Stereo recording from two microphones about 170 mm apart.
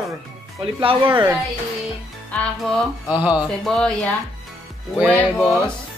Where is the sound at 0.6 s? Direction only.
30° right (ahead or behind).